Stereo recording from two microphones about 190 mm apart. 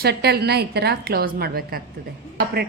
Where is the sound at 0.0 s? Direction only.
55° right (ahead or behind).